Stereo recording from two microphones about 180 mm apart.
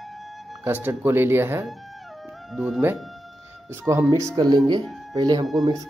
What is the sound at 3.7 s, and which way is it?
Speech, 15° right (ahead or behind).